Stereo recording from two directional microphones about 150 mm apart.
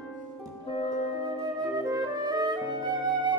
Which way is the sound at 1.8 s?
25° right (ahead or behind).